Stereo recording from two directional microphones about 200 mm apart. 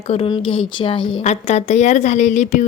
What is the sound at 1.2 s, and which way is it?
Speech, 35° left (ahead or behind).